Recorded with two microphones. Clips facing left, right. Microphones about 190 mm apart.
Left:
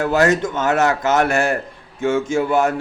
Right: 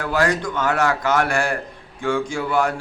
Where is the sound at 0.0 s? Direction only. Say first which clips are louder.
Left 5 dB; 25° left (ahead or behind).